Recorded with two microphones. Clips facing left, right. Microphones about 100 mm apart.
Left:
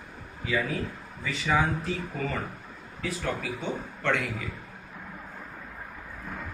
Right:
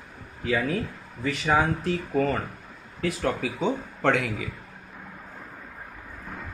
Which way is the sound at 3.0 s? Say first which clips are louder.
Right 5 dB; 80° right.